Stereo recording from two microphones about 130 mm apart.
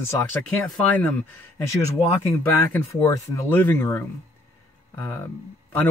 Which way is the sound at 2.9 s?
25° left (ahead or behind).